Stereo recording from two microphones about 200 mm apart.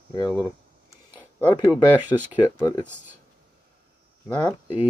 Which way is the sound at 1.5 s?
20° left (ahead or behind).